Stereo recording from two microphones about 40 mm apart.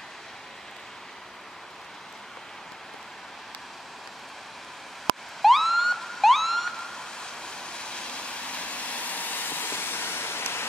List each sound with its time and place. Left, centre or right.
5.4 s emergency vehicle: centre
6.8 s vehicle: centre; by 10.6 s left